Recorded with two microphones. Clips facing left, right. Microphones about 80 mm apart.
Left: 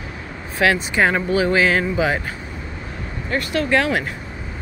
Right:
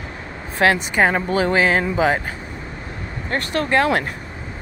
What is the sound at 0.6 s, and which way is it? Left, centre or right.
Speech, right.